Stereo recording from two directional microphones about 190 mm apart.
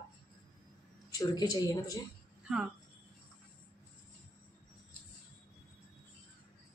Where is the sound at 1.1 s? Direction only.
20° left (ahead or behind).